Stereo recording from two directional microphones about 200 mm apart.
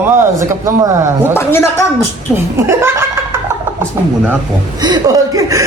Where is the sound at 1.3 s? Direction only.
10° left (ahead or behind).